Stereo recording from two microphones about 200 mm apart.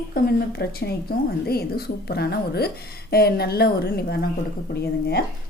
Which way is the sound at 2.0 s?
55° left (ahead or behind).